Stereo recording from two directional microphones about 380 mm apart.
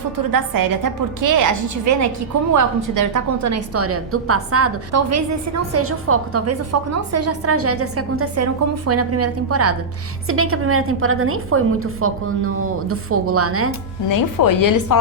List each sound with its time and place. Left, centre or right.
0.3 s a woman's voice: right
14.1 s a woman's voice: left